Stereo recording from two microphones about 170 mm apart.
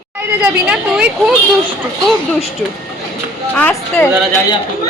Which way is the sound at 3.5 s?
10° left (ahead or behind).